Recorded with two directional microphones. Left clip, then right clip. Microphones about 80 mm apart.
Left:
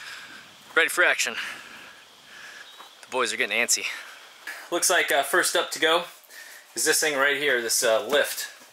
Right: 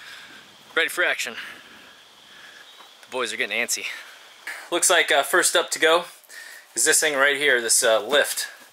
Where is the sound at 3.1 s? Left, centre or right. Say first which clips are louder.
Left 1 dB; centre.